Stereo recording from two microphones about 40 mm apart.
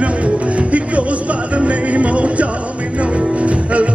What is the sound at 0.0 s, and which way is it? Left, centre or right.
Music, right.